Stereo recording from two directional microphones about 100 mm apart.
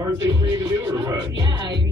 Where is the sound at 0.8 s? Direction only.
30° right (ahead or behind).